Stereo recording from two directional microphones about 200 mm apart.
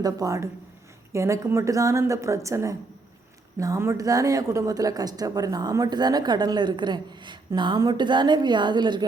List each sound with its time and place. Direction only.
0.0 s a woman's voice: 15° right (ahead or behind)